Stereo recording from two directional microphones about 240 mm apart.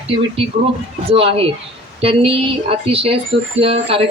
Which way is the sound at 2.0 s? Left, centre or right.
Right.